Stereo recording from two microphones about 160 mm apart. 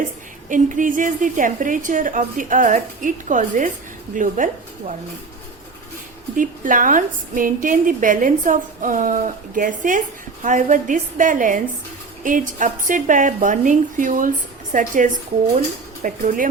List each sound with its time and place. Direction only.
0.4 s a woman's voice: 55° right (ahead or behind)
6.3 s a woman's voice: 55° right (ahead or behind)